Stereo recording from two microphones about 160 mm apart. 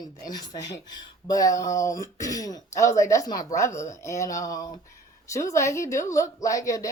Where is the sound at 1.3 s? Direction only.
20° left (ahead or behind).